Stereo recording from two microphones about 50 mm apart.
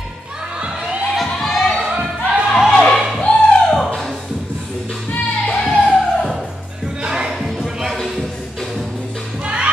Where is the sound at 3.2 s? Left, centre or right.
Centre.